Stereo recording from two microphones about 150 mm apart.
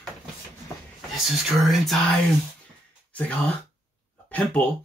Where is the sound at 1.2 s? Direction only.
Centre (ahead or behind).